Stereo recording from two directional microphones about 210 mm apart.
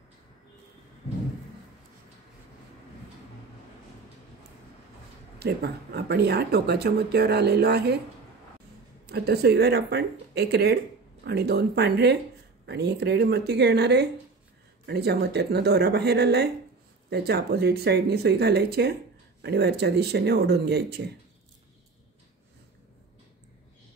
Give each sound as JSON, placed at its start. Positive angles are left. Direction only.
{"t": 5.4, "sound": "speech", "side_deg": -50}
{"t": 9.1, "sound": "speech", "side_deg": -50}